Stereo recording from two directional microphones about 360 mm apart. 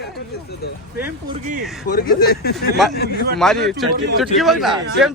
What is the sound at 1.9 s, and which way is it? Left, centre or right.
Speech, left.